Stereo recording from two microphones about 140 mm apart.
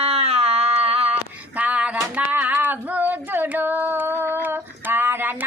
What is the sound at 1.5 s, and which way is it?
Female singing, 10° right (ahead or behind).